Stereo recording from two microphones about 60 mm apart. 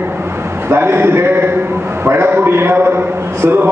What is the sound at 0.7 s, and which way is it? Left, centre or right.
A man's voice, right.